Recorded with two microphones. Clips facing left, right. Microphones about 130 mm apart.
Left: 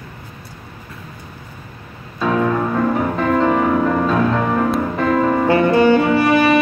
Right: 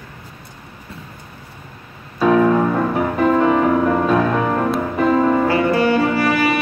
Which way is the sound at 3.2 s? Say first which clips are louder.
Right 2 dB; 10° right (ahead or behind).